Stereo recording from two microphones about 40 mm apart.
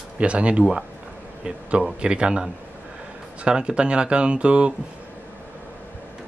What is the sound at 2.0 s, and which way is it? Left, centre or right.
Speech, right.